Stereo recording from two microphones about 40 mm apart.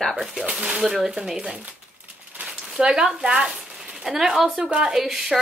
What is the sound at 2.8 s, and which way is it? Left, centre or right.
Speech, centre.